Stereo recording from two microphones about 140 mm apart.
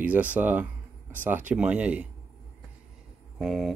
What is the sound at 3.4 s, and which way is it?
Speech, centre (ahead or behind).